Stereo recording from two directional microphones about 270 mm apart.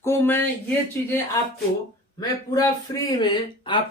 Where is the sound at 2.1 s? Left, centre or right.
Centre.